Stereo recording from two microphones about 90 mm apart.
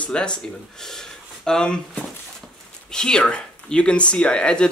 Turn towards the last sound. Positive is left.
turn(degrees=10)  # may be behind; listen again after turning